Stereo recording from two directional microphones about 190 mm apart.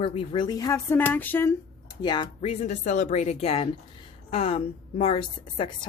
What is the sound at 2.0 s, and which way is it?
A woman's voice, 25° left (ahead or behind).